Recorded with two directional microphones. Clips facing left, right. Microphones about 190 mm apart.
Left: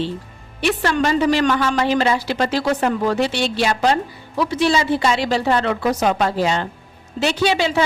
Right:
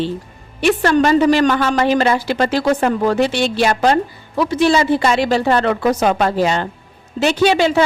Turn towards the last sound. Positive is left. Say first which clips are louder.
# right 4 dB
turn(degrees=-50)  # may be behind; listen again after turning